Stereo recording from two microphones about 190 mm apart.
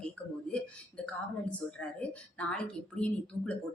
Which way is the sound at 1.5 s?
5° left (ahead or behind).